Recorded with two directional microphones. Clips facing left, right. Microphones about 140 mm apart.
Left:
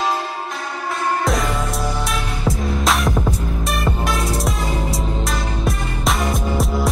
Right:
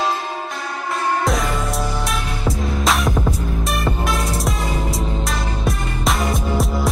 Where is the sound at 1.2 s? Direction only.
Centre (ahead or behind).